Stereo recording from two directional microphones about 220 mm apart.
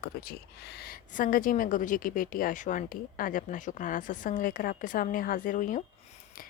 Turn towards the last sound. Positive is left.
turn(degrees=35)  # may be behind; listen again after turning